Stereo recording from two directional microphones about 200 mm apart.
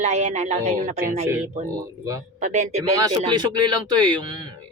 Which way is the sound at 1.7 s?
15° right (ahead or behind).